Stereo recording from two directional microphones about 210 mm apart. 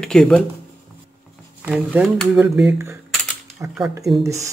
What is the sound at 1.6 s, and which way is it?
Speech, 5° right (ahead or behind).